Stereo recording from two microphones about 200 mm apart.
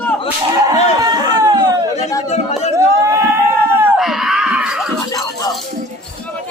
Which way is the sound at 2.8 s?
15° right (ahead or behind).